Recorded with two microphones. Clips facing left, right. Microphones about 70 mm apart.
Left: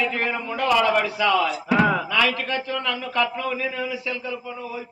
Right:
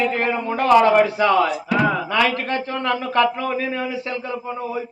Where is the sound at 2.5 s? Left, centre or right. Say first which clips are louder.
Right 4 dB; right.